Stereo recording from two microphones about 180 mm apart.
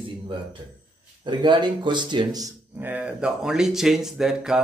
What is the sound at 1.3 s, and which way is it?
Speech, 25° right (ahead or behind).